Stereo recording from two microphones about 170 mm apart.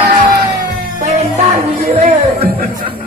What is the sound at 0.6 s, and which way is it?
Music, 45° right (ahead or behind).